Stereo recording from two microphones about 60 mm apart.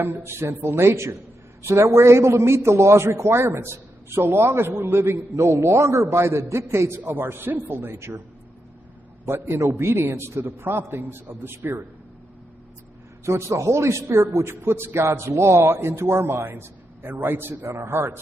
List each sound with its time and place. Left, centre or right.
0.0 s a man's voice: right
5.3 s a man's voice: right
7.1 s a man's voice: right
9.2 s a man's voice: right
13.2 s a man's voice: right
17.6 s a man's voice: right